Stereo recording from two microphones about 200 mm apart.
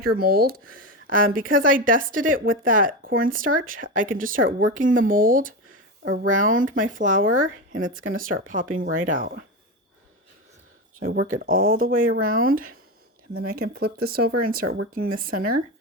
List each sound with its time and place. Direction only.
0.0 s speech: 50° right (ahead or behind)
11.0 s speech: 45° right (ahead or behind)
14.7 s speech: 90° right
15.1 s speech: 45° right (ahead or behind)